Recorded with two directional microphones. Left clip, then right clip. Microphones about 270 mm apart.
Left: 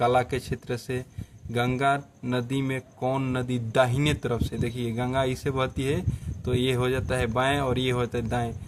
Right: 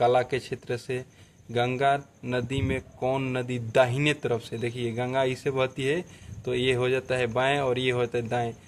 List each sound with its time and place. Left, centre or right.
0.0 s speech: left